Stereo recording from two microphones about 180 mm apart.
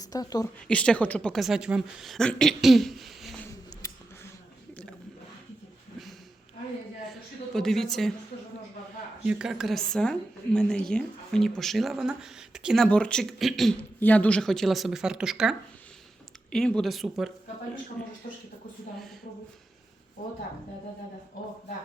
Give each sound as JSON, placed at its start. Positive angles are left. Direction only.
{"t": 0.0, "sound": "speech", "side_deg": 20}
{"t": 0.7, "sound": "a woman's voice", "side_deg": 5}
{"t": 3.8, "sound": "scissors", "side_deg": 15}
{"t": 7.1, "sound": "a woman's voice", "side_deg": 0}
{"t": 9.2, "sound": "a woman's voice", "side_deg": -5}
{"t": 18.2, "sound": "speech", "side_deg": 50}